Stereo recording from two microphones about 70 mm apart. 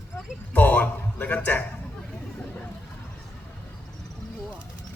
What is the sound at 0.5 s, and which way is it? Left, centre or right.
A man's voice, left.